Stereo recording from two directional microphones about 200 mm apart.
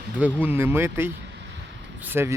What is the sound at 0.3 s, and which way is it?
Speech, 10° right (ahead or behind).